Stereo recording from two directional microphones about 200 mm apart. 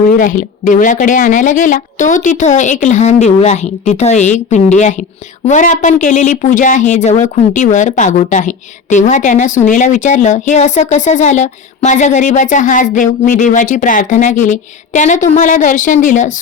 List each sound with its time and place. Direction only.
0.2 s speech: 40° left (ahead or behind)